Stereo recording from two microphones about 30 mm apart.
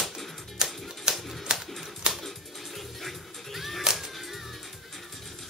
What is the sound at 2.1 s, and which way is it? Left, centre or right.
Music, centre.